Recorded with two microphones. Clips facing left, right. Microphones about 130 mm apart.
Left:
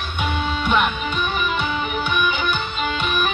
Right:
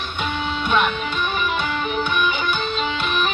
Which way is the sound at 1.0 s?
15° left (ahead or behind).